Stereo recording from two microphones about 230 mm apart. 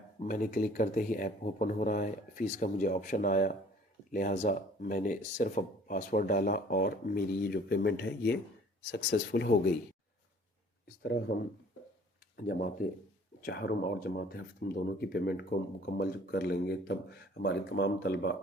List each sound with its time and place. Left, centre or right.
0.2 s speech: left
11.0 s speech: left